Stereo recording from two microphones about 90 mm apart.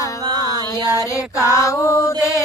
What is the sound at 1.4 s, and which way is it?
Mantra, 35° left (ahead or behind).